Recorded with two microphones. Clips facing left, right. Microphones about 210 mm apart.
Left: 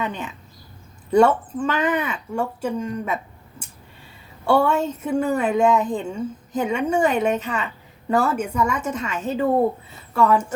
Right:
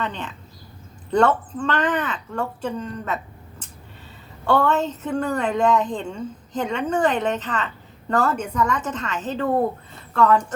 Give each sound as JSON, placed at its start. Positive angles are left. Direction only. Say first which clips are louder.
{"t": 0.0, "sound": "a woman's voice", "louder": "left 1 dB", "side_deg": 10}